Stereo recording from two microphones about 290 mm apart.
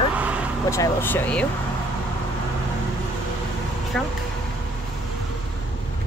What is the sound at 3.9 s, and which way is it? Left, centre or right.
Speech, centre.